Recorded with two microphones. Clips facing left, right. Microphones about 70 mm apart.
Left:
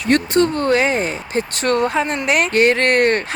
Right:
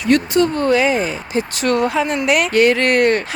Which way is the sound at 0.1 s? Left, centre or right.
Left.